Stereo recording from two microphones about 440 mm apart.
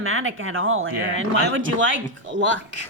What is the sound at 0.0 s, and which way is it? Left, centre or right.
Speech, right.